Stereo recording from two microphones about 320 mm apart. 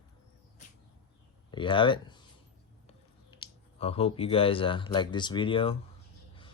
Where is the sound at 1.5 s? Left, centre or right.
Centre.